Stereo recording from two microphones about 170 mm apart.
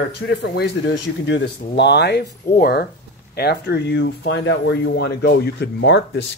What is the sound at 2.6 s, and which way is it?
Speech, 65° left (ahead or behind).